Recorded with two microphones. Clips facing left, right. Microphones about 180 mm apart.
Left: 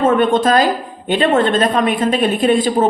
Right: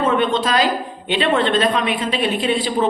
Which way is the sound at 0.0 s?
50° left (ahead or behind).